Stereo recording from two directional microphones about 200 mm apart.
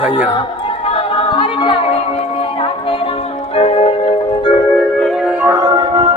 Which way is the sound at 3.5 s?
30° left (ahead or behind).